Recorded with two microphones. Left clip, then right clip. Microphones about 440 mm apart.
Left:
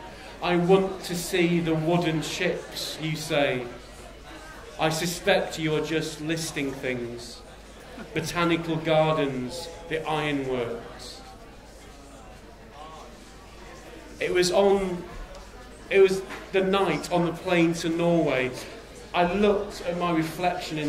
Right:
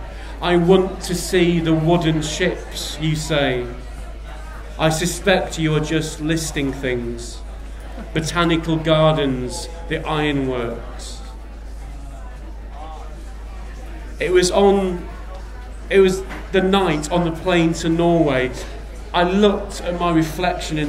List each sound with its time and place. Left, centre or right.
0.4 s a man's voice: right
4.7 s a man's voice: right
14.1 s a man's voice: right
15.9 s a man's voice: right